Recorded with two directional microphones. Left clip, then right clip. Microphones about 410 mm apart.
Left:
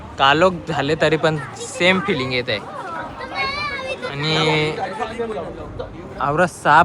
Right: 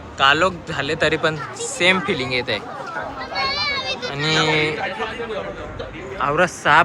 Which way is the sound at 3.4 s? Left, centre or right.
Centre.